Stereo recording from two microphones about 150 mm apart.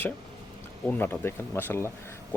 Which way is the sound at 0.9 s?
15° left (ahead or behind).